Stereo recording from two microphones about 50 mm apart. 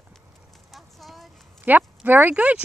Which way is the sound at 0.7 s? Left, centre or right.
Centre.